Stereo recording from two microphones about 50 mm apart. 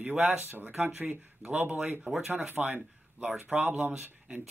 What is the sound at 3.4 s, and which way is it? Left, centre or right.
Speech, right.